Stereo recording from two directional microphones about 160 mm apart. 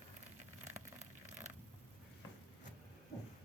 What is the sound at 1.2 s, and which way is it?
Zipper, 45° right (ahead or behind).